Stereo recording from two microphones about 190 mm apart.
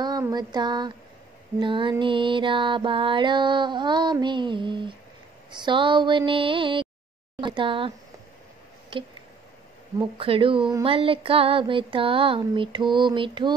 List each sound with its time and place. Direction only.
0.0 s a sound: 20° right (ahead or behind)
1.6 s speech: 25° right (ahead or behind)
8.9 s speech: 25° right (ahead or behind)